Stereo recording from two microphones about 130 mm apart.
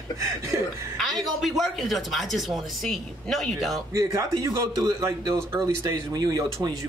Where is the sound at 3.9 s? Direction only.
25° right (ahead or behind).